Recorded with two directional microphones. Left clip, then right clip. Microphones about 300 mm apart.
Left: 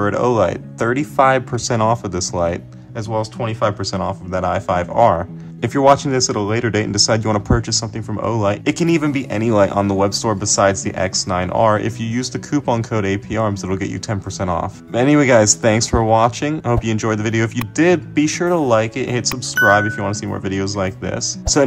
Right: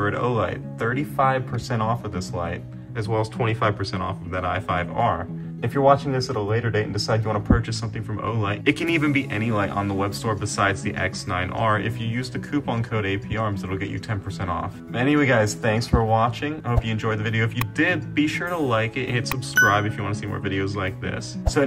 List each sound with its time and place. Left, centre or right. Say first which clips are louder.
0.0 s speech: left 8 dB; centre
3.1 s speech: left 3 dB; centre